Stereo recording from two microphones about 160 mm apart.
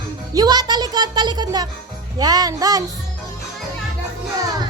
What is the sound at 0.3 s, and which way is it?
A child's voice, 25° right (ahead or behind).